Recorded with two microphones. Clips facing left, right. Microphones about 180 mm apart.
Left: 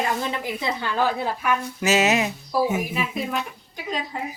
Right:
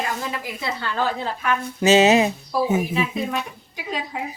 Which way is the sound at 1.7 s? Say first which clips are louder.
Right 7 dB; 30° right (ahead or behind).